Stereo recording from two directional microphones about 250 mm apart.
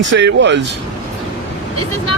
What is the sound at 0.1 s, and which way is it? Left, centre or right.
Speech, right.